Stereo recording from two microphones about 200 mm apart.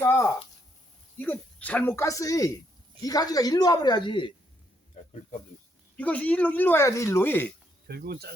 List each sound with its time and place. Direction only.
0.0 s speech: 10° left (ahead or behind)
5.0 s a sound: 35° left (ahead or behind)
6.0 s speech: 5° left (ahead or behind)
7.9 s speech: 50° right (ahead or behind)